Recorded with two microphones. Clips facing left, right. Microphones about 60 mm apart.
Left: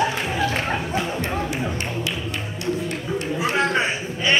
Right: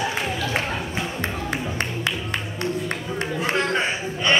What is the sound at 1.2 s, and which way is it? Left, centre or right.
Music, right.